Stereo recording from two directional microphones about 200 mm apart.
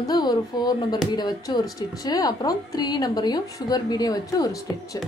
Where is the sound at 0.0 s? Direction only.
20° left (ahead or behind).